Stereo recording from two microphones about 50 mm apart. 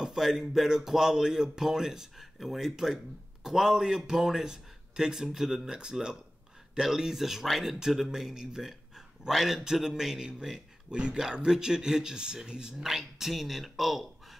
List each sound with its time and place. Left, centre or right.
0.0 s speech: centre